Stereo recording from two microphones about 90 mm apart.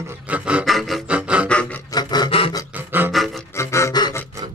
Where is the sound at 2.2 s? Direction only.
90° left.